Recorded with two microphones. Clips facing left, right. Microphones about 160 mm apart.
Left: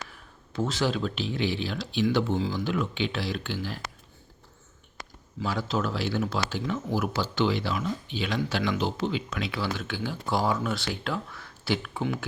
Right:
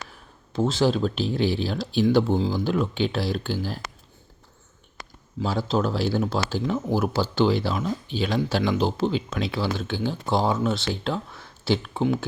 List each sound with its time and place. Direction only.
0.5 s speech: 30° right (ahead or behind)
5.4 s speech: 30° right (ahead or behind)